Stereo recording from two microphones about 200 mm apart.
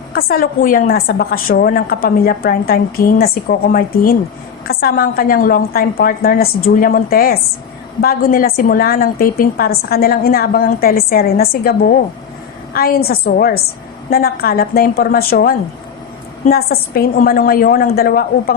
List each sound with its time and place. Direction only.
0.1 s a woman's voice: 50° left (ahead or behind)